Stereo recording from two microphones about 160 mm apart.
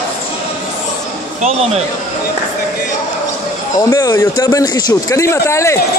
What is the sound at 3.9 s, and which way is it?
Speech, 20° left (ahead or behind).